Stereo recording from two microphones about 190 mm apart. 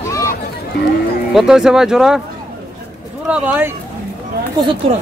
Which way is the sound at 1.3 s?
Centre (ahead or behind).